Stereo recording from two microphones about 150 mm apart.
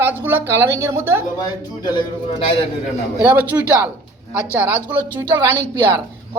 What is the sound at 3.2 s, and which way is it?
Speech, 10° right (ahead or behind).